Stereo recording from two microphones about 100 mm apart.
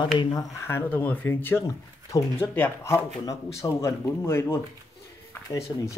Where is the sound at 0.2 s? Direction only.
40° left (ahead or behind); by 1.6 s 20° left (ahead or behind).